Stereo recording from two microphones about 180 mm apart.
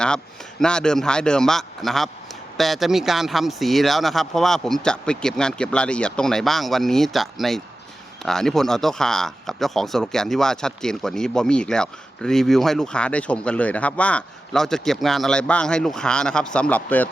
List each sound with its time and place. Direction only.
0.6 s speech: 5° left (ahead or behind)